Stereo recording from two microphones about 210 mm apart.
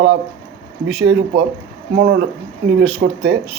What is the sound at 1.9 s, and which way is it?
Speech, 50° right (ahead or behind).